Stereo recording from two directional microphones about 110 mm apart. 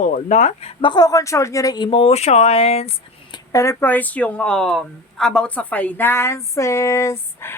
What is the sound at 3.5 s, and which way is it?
Speech, 30° left (ahead or behind).